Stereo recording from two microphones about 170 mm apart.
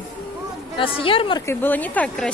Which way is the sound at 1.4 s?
10° left (ahead or behind).